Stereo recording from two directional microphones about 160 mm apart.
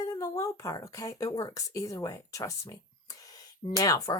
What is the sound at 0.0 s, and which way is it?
Speech, 20° left (ahead or behind).